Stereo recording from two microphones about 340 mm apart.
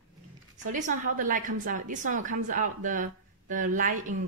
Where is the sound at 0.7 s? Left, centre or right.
Right.